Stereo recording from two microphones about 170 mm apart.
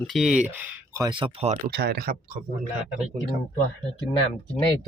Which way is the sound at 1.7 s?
70° right (ahead or behind).